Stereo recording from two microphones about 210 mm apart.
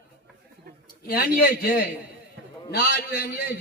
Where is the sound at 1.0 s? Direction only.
45° left (ahead or behind).